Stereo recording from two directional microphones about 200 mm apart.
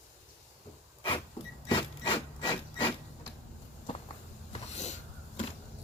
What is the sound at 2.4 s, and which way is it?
Hammer, 25° left (ahead or behind).